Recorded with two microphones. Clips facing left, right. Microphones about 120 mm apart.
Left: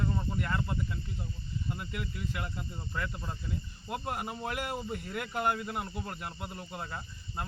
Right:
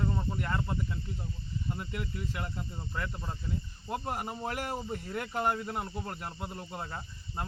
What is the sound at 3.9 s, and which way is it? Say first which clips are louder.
Speech: right 1 dB; 30° right (ahead or behind).